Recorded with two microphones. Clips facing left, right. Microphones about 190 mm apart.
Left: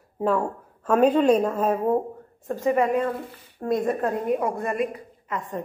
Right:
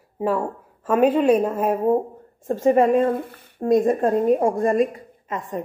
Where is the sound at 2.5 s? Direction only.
30° right (ahead or behind).